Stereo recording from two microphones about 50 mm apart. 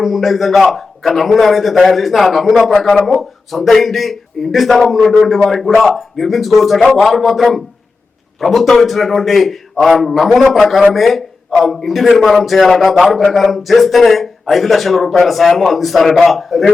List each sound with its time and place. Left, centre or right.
0.0 s a man's voice: centre